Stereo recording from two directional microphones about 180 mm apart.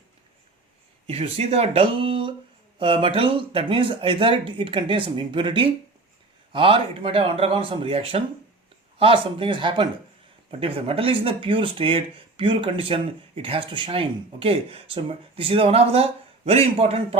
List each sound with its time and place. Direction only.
1.0 s speech: 30° right (ahead or behind)